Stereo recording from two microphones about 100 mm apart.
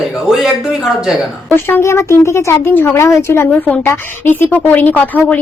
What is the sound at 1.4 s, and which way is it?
Speech, 25° left (ahead or behind).